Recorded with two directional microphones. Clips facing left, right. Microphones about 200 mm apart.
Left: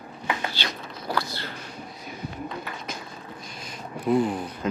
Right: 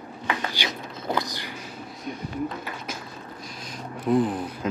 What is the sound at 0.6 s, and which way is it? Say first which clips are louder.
Biting: right 2 dB; 15° right (ahead or behind).